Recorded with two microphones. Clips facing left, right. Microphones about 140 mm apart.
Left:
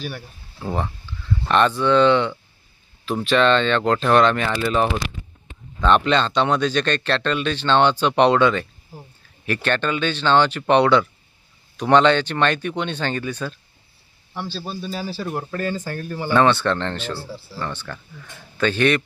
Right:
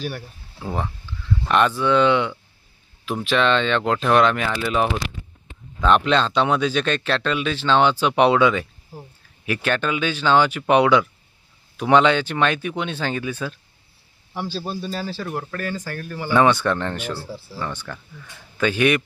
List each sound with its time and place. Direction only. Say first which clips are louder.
0.6 s speech: left 2 dB; centre (ahead or behind)
15.2 s speech: left 2 dB; 20° left (ahead or behind)
16.3 s speech: even; 10° right (ahead or behind)